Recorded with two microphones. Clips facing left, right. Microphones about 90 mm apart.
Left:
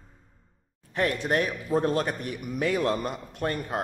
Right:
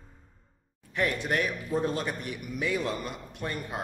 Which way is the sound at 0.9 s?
40° left (ahead or behind).